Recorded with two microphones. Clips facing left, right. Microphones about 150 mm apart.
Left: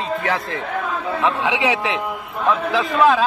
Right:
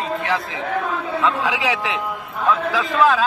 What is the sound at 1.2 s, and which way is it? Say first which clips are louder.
A man's voice: left 1 dB; 25° left (ahead or behind).